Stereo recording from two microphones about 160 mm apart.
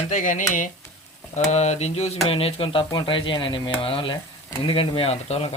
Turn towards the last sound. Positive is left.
turn(degrees=40)  # may be behind; listen again after turning